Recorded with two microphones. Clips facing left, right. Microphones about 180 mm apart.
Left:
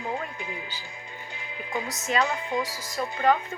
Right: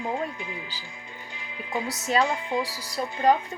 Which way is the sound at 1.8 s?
35° right (ahead or behind).